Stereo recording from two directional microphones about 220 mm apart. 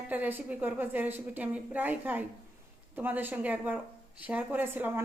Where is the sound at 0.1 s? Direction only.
10° right (ahead or behind).